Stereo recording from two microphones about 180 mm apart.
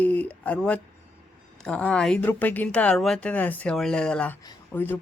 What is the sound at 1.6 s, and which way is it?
Speech, 5° left (ahead or behind).